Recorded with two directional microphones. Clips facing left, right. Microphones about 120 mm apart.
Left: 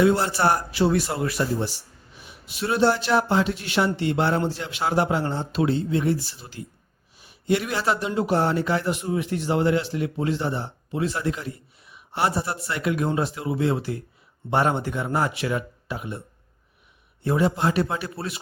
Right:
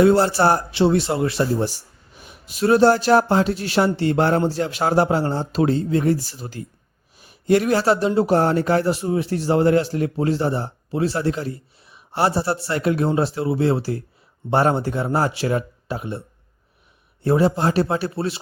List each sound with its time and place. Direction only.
0.0 s a man's voice: 35° right (ahead or behind)
2.2 s speech: 40° right (ahead or behind)
17.2 s speech: 35° right (ahead or behind)